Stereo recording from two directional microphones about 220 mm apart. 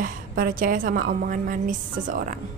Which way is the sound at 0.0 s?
40° right (ahead or behind).